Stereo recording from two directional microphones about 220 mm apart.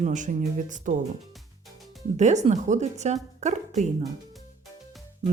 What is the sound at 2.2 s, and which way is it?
Speech, 30° right (ahead or behind).